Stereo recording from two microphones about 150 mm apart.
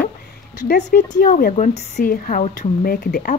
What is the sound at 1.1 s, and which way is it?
Speech, 70° left (ahead or behind).